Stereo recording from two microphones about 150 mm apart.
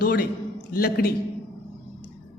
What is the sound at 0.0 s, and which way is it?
A man's voice, 90° left.